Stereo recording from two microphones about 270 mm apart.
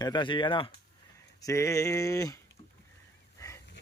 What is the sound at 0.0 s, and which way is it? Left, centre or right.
A man's voice, centre.